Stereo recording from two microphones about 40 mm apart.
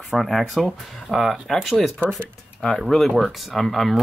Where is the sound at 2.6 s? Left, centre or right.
Centre.